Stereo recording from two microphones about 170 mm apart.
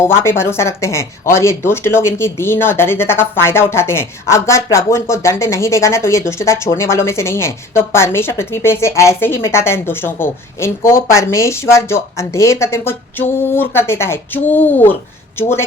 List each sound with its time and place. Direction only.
0.0 s speech: 15° left (ahead or behind)